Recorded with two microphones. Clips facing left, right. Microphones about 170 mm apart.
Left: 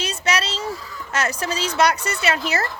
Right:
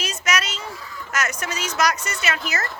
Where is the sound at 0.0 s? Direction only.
30° left (ahead or behind).